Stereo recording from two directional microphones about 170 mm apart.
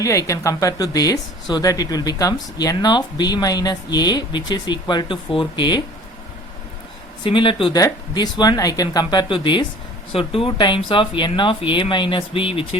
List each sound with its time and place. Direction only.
0.0 s speech: 20° left (ahead or behind)
7.3 s speech: 30° left (ahead or behind)